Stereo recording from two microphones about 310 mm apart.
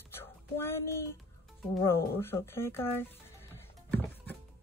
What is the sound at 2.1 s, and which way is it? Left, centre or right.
Music, centre.